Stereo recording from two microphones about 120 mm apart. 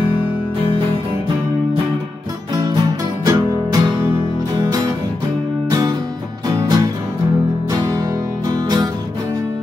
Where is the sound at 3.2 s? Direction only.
30° right (ahead or behind).